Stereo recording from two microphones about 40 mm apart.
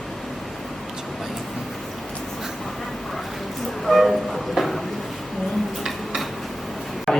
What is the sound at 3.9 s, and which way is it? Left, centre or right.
Train, centre.